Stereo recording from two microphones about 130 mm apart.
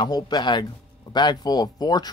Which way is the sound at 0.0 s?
35° left (ahead or behind).